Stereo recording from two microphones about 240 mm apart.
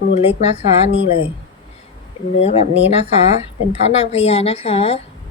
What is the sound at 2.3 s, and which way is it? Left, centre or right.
Speech, left.